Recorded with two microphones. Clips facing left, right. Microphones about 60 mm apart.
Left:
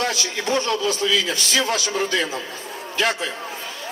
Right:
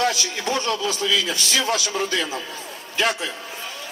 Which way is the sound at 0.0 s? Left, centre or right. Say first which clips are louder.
Right 1 dB; left.